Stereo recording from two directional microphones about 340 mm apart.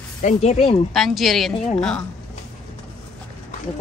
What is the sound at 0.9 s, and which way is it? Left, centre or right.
Speech, centre.